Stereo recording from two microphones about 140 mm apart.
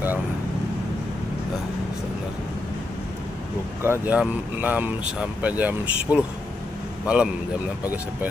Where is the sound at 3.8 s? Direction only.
15° right (ahead or behind).